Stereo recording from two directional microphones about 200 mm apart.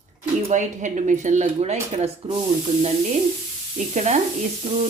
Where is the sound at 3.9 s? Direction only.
35° right (ahead or behind).